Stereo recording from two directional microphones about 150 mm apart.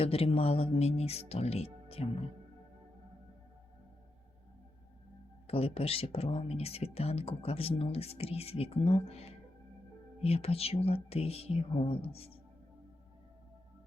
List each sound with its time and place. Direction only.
0.0 s speech: 40° left (ahead or behind)
5.5 s speech: 40° left (ahead or behind)